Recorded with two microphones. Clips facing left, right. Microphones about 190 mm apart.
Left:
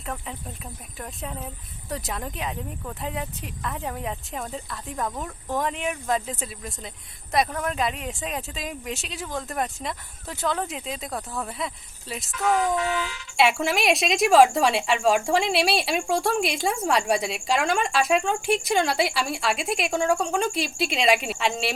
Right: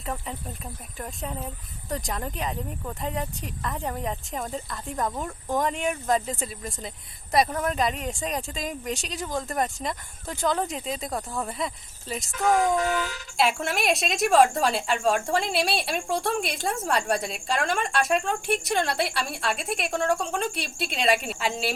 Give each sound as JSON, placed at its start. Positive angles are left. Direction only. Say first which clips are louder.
{"t": 0.0, "sound": "speech", "louder": "right 1 dB", "side_deg": 0}
{"t": 12.5, "sound": "a sound", "louder": "right 1 dB", "side_deg": -40}
{"t": 13.5, "sound": "speech", "louder": "left 3 dB", "side_deg": 0}